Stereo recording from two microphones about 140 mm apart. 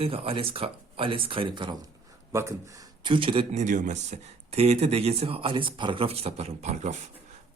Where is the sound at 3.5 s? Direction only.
60° right (ahead or behind).